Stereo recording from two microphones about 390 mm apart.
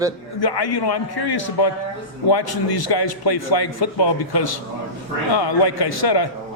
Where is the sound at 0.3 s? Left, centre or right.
Left.